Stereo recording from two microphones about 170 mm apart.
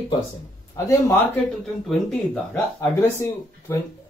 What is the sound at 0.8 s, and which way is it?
Speech, 20° left (ahead or behind).